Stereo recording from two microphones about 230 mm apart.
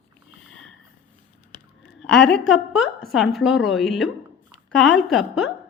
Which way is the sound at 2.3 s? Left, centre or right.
Centre.